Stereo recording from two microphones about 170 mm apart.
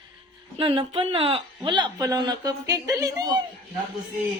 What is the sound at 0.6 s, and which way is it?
Speech, 30° right (ahead or behind).